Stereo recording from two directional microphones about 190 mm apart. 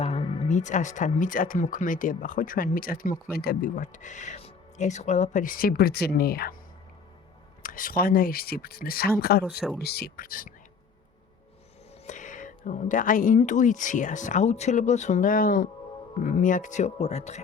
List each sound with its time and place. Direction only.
0.0 s speech: 30° left (ahead or behind); by 6.6 s 50° left (ahead or behind)
7.6 s speech: 45° left (ahead or behind)
12.0 s speech: 40° left (ahead or behind)